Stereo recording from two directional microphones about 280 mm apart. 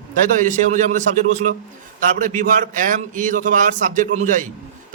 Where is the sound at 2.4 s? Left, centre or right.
Right.